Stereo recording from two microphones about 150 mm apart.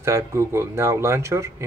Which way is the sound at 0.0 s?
20° right (ahead or behind).